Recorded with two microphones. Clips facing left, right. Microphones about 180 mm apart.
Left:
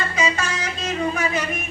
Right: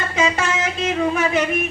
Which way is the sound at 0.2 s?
55° right (ahead or behind).